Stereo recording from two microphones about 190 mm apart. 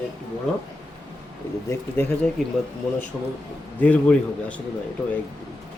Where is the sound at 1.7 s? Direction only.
10° left (ahead or behind).